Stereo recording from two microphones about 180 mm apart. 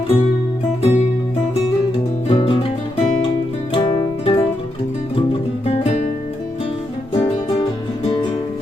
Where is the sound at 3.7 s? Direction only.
25° left (ahead or behind).